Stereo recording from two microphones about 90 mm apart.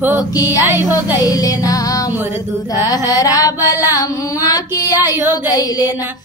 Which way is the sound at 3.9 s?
45° left (ahead or behind).